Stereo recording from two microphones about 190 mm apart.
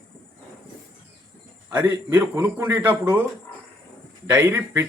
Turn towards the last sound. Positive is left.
turn(degrees=-10)  # may be behind; listen again after turning